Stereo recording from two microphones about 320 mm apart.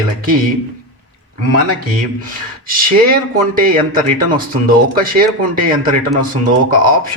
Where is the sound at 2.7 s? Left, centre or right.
Right.